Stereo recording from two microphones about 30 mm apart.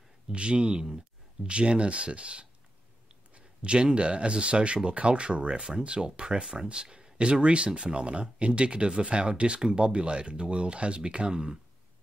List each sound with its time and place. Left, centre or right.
0.3 s speech: right